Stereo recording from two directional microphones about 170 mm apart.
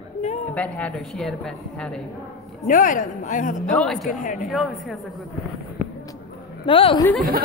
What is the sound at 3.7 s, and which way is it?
Speech, centre (ahead or behind).